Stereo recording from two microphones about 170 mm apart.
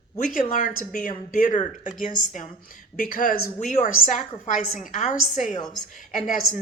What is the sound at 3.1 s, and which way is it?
Speech, 55° left (ahead or behind).